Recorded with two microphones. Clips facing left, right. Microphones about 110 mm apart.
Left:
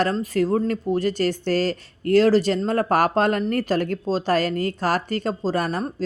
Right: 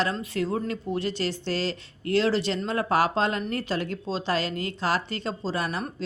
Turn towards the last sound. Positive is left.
turn(degrees=40)  # may be behind; listen again after turning